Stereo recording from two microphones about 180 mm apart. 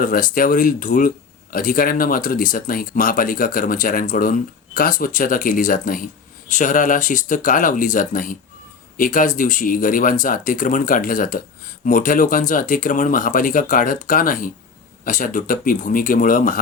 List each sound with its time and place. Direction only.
0.0 s speech: 50° left (ahead or behind)